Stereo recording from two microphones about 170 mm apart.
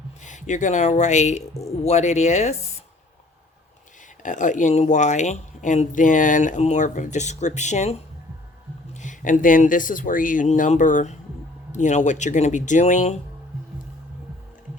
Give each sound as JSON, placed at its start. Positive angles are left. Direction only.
{"t": 0.2, "sound": "speech", "side_deg": 45}
{"t": 4.2, "sound": "speech", "side_deg": 50}